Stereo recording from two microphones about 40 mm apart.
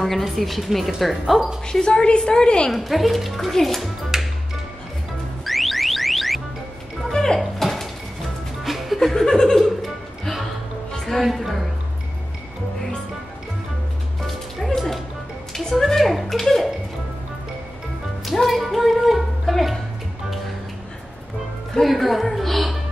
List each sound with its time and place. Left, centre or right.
0.0 s a child's voice: centre
1.7 s a woman's voice: left
2.7 s a child's voice: centre
4.1 s music: centre
5.4 s car alarm: centre
7.1 s music: centre
7.5 s door: centre
8.6 s chuckle: centre
10.2 s music: centre
14.2 s music: centre
15.9 s a sound: centre
18.2 s music: centre
21.8 s music: centre